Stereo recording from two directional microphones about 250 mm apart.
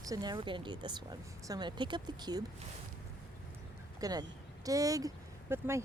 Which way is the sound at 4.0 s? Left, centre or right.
Centre.